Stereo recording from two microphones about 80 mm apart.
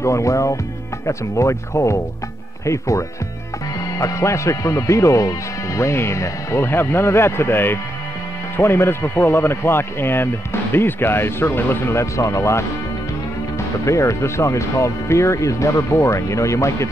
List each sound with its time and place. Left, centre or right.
0.0 s speech: left
13.8 s speech: left